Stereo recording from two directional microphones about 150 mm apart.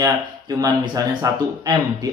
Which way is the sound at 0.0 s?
25° right (ahead or behind).